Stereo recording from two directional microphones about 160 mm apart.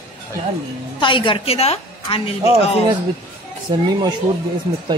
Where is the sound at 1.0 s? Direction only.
30° left (ahead or behind).